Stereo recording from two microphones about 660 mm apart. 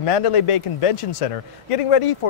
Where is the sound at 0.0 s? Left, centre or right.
Left.